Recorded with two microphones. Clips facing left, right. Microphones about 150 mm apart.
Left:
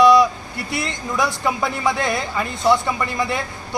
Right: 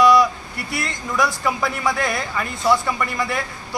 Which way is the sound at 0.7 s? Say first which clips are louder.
Even; 25° left (ahead or behind).